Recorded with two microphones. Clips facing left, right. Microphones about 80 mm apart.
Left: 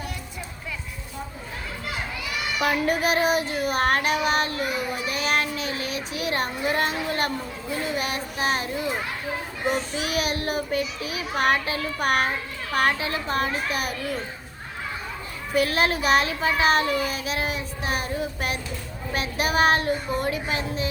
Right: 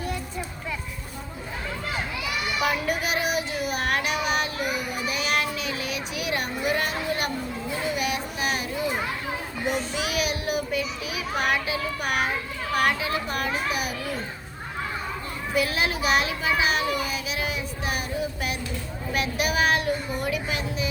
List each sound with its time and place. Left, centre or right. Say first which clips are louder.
2.6 s a child's voice: left 4 dB; left
5.1 s child singing: left 1 dB; left
7.9 s a child's voice: even; left
9.9 s a child's voice: left 1 dB; left
12.7 s a child's voice: left 1 dB; left
15.5 s a child's voice: left 3 dB; left
19.1 s a child's voice: left 1 dB; left